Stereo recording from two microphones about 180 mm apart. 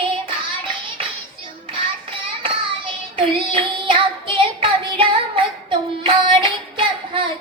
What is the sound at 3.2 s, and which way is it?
Child singing, 30° right (ahead or behind).